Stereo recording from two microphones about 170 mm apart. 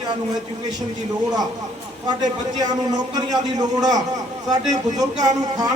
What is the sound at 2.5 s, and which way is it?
A man's voice, 25° right (ahead or behind).